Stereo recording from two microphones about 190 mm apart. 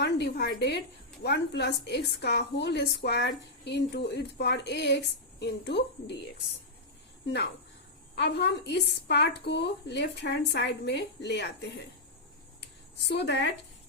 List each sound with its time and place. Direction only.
0.0 s a woman's voice: 60° left (ahead or behind)
8.1 s a woman's voice: 65° left (ahead or behind)
12.5 s a sound: 65° left (ahead or behind)